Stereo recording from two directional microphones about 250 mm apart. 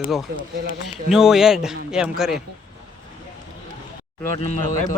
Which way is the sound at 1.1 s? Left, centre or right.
Centre.